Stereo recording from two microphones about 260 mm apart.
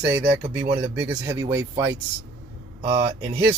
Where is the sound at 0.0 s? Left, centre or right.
Centre.